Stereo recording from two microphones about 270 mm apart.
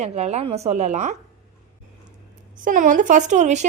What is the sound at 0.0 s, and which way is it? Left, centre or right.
Speech, right.